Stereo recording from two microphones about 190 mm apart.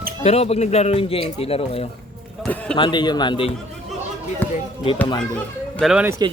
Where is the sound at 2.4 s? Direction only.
5° left (ahead or behind).